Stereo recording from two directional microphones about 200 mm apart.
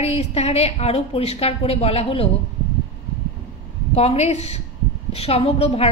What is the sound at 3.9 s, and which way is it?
A woman's voice, 30° left (ahead or behind).